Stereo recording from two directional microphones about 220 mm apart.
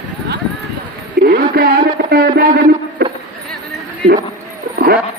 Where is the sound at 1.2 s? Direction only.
45° right (ahead or behind).